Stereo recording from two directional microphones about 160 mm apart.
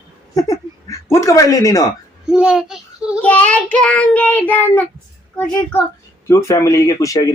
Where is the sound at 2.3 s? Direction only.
5° right (ahead or behind).